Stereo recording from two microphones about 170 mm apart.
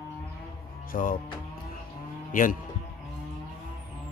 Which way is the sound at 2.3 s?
50° left (ahead or behind).